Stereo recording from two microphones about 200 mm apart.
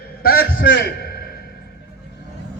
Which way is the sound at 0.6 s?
60° left (ahead or behind).